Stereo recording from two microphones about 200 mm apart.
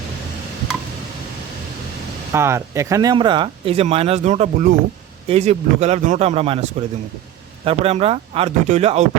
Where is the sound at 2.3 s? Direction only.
15° right (ahead or behind).